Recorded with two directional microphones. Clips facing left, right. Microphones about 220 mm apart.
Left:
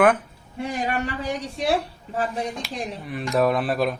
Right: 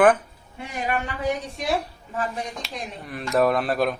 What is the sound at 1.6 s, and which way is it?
Speech, 30° left (ahead or behind).